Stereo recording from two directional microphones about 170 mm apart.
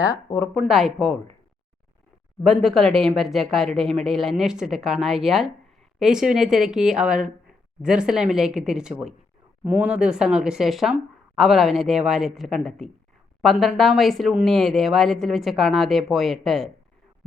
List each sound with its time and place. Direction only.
0.0 s speech: 20° left (ahead or behind)
0.6 s speech: centre (ahead or behind)
2.4 s speech: centre (ahead or behind)